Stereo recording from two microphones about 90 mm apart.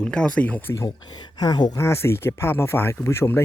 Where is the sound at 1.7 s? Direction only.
30° left (ahead or behind).